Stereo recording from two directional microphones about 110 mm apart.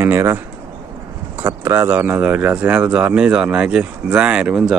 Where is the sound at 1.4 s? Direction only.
20° right (ahead or behind).